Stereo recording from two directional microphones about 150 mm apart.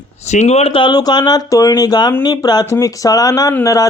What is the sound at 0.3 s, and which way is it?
Speech, 50° left (ahead or behind).